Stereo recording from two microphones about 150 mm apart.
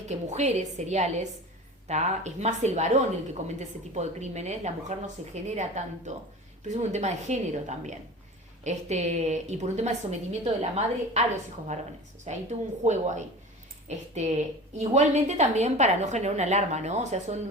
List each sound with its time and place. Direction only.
0.1 s a woman's voice: 50° right (ahead or behind)